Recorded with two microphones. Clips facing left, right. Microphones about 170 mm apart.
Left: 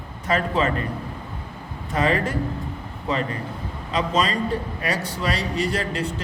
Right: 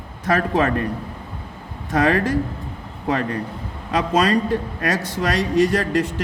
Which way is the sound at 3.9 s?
65° right (ahead or behind).